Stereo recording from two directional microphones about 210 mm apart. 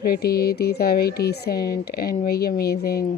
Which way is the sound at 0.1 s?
45° left (ahead or behind).